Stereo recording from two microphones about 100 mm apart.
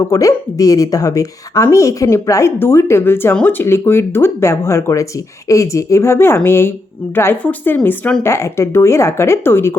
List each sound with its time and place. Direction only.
0.0 s speech: 30° left (ahead or behind)